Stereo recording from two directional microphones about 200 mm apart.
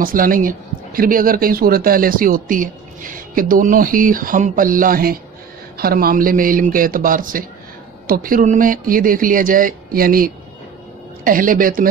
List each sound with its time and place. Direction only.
0.0 s speech: 45° right (ahead or behind)